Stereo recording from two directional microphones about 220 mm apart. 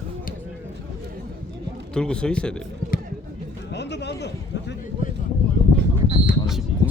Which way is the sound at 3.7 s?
50° left (ahead or behind).